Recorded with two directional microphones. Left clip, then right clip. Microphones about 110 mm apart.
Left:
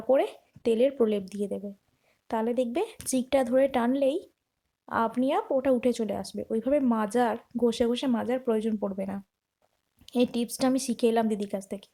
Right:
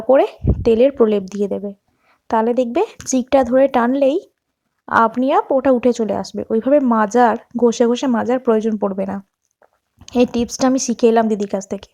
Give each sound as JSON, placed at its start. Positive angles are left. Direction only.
{"t": 0.1, "sound": "a woman's voice", "side_deg": -40}
{"t": 10.3, "sound": "a woman's voice", "side_deg": -40}